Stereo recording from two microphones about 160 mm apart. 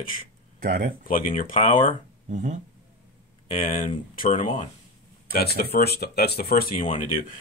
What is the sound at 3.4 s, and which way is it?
Speech, 50° left (ahead or behind).